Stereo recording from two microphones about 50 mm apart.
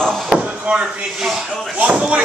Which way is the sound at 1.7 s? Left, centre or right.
Right.